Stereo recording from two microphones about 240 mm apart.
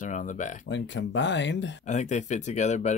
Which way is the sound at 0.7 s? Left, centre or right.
Left.